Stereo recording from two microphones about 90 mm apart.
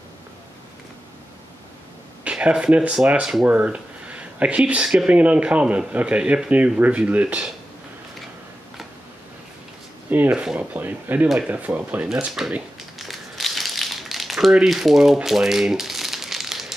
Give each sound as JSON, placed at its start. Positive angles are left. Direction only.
{"t": 2.2, "sound": "speech", "side_deg": -10}
{"t": 10.0, "sound": "speech", "side_deg": -20}
{"t": 12.4, "sound": "speech", "side_deg": -5}
{"t": 13.0, "sound": "crumpling", "side_deg": 0}
{"t": 14.5, "sound": "speech", "side_deg": -5}
{"t": 15.2, "sound": "crumpling", "side_deg": -5}